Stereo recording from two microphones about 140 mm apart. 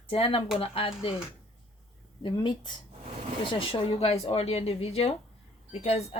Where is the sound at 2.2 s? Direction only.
35° left (ahead or behind).